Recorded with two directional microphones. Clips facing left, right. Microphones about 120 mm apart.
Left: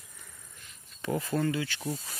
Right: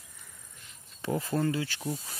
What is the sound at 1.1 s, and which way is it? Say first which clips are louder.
Speech: even; 25° right (ahead or behind).